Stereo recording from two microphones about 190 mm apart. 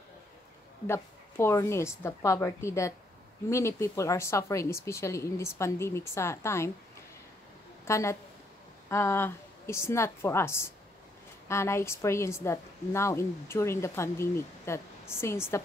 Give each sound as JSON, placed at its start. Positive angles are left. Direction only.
{"t": 0.8, "sound": "a woman's voice", "side_deg": 15}
{"t": 7.8, "sound": "a woman's voice", "side_deg": 15}